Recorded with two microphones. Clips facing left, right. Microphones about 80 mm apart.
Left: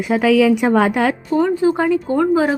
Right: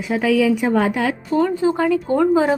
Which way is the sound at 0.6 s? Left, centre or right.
Left.